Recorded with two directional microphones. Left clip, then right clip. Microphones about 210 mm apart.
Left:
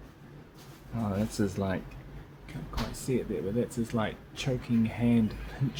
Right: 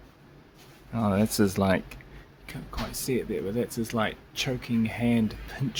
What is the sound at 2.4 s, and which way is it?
Speech, 40° right (ahead or behind).